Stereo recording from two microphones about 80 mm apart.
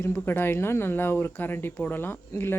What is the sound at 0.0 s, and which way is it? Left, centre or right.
Speech, left.